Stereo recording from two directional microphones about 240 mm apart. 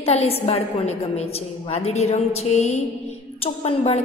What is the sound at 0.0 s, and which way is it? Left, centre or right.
A woman's voice, left.